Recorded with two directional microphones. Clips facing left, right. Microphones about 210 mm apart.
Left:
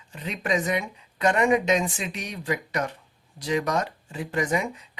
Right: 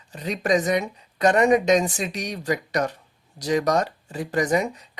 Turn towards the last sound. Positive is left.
turn(degrees=-40)  # may be behind; listen again after turning